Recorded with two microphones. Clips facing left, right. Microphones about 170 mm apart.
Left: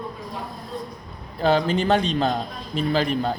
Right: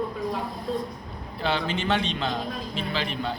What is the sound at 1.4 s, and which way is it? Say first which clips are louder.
A man's voice: left 7 dB; 40° left (ahead or behind).